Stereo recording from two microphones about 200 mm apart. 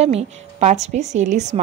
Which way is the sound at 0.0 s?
35° right (ahead or behind).